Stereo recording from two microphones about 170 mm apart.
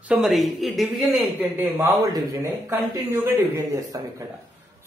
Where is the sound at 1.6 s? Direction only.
20° right (ahead or behind).